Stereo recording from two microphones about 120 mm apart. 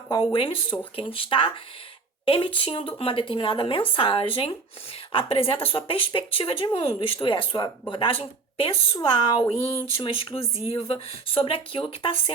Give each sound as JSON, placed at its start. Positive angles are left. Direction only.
{"t": 0.1, "sound": "speech", "side_deg": 40}
{"t": 9.0, "sound": "speech", "side_deg": 40}